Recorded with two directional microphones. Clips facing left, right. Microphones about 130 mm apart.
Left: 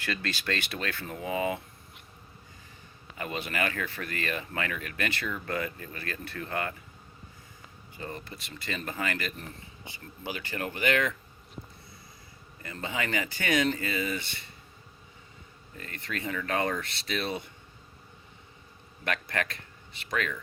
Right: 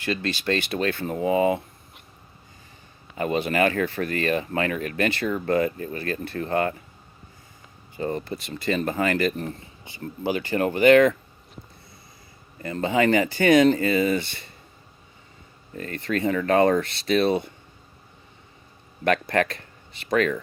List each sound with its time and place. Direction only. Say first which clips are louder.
0.0 s speech: right 7 dB; 25° right (ahead or behind)
3.2 s speech: right 10 dB; 35° right (ahead or behind)
7.9 s speech: right 12 dB; 35° right (ahead or behind)
12.6 s speech: right 13 dB; 40° right (ahead or behind)
15.7 s speech: right 11 dB; 45° right (ahead or behind)
19.0 s speech: right 10 dB; 45° right (ahead or behind)